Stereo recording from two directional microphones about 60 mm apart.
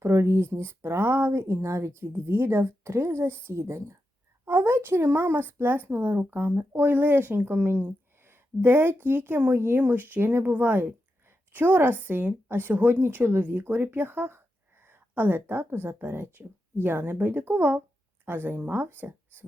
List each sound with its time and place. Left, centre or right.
0.0 s speech: right